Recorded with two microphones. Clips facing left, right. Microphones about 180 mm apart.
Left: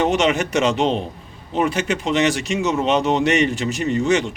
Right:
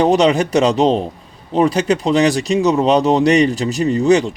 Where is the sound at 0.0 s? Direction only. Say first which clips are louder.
Right 5 dB; 35° right (ahead or behind).